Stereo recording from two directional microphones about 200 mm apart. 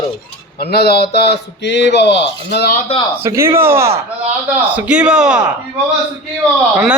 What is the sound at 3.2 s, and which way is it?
A man's voice, 15° right (ahead or behind).